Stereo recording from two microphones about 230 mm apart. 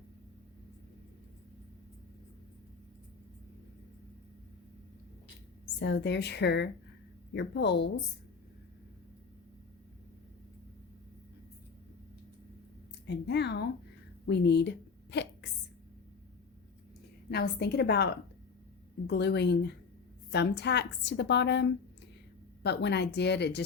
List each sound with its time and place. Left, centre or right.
5.8 s a woman's voice: left
13.1 s a woman's voice: left
14.3 s a sound: left
17.3 s a woman's voice: left